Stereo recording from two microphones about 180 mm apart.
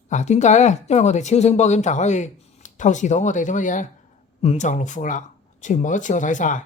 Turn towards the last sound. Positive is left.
turn(degrees=45)  # may be behind; listen again after turning